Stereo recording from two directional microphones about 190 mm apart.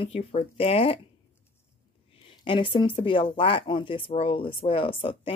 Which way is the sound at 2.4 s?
25° left (ahead or behind).